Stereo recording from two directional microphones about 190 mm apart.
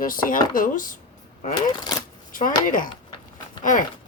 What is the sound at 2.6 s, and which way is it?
Speech, 45° left (ahead or behind).